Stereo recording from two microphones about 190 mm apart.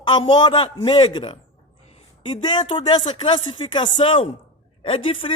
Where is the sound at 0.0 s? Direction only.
25° left (ahead or behind).